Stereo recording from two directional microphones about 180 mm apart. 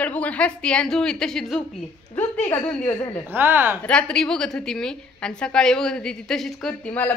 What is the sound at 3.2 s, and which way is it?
Speech, 10° right (ahead or behind).